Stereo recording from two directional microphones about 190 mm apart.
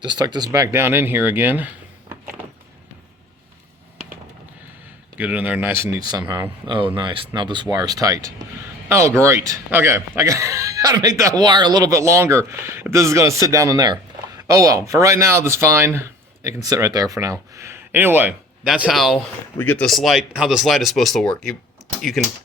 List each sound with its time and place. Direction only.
0.0 s speech: 25° right (ahead or behind)
5.1 s speech: 10° right (ahead or behind)